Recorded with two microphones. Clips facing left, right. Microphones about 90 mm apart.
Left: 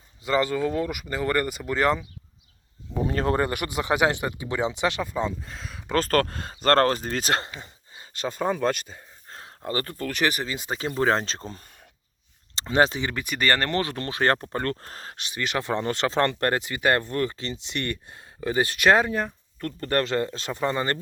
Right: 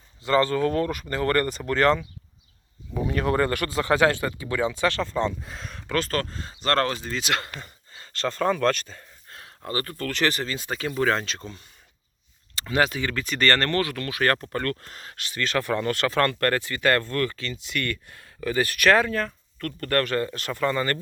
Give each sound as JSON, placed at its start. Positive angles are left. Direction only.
{"t": 0.3, "sound": "speech", "side_deg": 15}
{"t": 3.1, "sound": "speech", "side_deg": 30}
{"t": 3.4, "sound": "speech", "side_deg": 20}
{"t": 5.4, "sound": "speech", "side_deg": 0}
{"t": 6.0, "sound": "speech", "side_deg": 50}
{"t": 7.6, "sound": "speech", "side_deg": 15}
{"t": 9.3, "sound": "a sound", "side_deg": 30}
{"t": 10.0, "sound": "speech", "side_deg": 15}
{"t": 15.1, "sound": "speech", "side_deg": 20}